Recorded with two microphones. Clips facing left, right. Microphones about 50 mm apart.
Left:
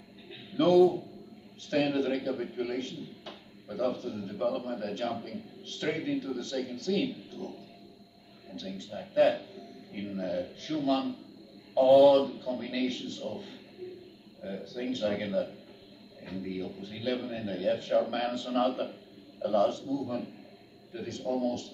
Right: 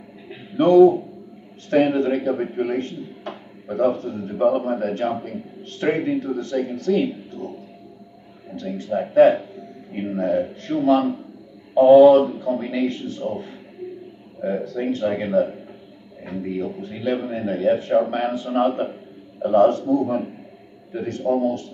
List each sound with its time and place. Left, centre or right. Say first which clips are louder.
0.3 s a sound: right 8 dB; right
1.7 s a man's voice: right 10 dB; right
8.5 s a sound: right 10 dB; right
8.7 s a man's voice: right 12 dB; right
14.4 s a man's voice: right 12 dB; right
19.7 s a man's voice: right 13 dB; right